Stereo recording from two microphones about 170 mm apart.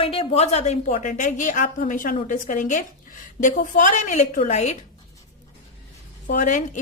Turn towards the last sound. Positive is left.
turn(degrees=45)  # may be behind; listen again after turning